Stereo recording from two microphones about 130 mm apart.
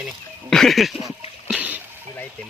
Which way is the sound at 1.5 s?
10° right (ahead or behind).